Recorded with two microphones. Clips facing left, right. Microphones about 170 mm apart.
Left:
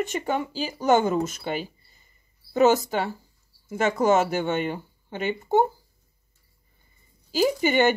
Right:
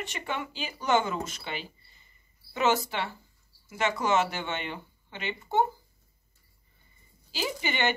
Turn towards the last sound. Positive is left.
turn(degrees=45)  # may be behind; listen again after turning